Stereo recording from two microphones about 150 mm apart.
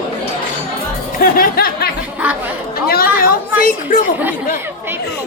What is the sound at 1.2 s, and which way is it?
Music, 75° left (ahead or behind).